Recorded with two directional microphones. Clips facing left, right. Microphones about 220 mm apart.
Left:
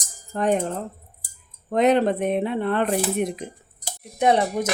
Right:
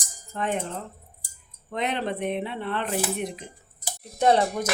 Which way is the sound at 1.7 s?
45° left (ahead or behind).